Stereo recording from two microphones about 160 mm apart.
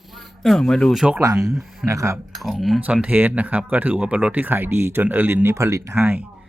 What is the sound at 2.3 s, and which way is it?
Speech, centre (ahead or behind).